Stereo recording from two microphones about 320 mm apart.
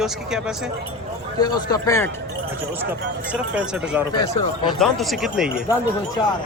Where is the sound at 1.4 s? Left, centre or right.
Centre.